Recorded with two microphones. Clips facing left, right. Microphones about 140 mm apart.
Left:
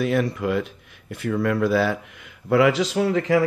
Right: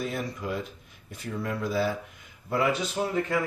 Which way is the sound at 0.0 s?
80° left.